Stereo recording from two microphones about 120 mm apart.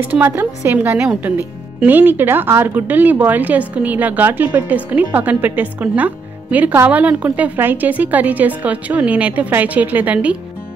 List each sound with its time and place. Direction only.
0.0 s speech: 15° right (ahead or behind)